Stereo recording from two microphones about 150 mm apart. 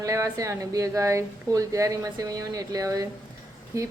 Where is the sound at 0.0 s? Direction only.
20° right (ahead or behind).